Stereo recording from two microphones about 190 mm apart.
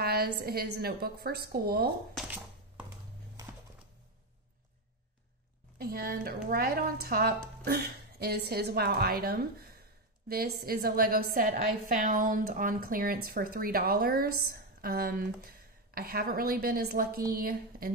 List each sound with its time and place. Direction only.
0.0 s a woman's voice: 55° right (ahead or behind)
2.1 s a sound: 5° right (ahead or behind)
5.8 s a woman's voice: 50° right (ahead or behind)